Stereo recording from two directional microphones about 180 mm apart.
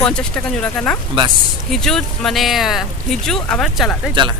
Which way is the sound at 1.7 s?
Centre (ahead or behind).